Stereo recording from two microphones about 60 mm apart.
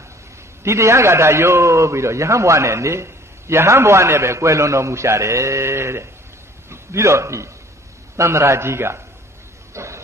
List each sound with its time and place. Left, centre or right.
0.7 s a man's voice: right
9.8 s pig: right